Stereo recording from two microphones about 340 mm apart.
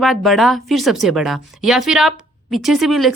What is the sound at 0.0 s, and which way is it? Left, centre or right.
A woman's voice, centre.